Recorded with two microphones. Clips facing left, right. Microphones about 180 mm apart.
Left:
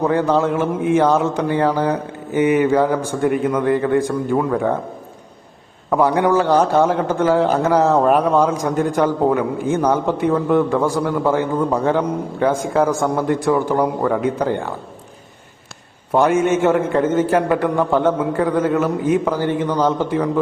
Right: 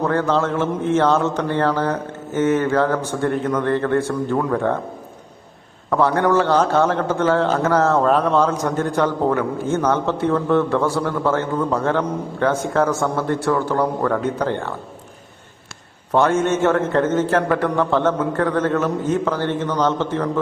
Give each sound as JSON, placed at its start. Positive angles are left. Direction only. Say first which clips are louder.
{"t": 0.0, "sound": "a man's voice", "louder": "left 2 dB", "side_deg": 15}
{"t": 5.9, "sound": "a man's voice", "louder": "left 1 dB", "side_deg": 10}
{"t": 16.1, "sound": "a man's voice", "louder": "left 2 dB", "side_deg": 10}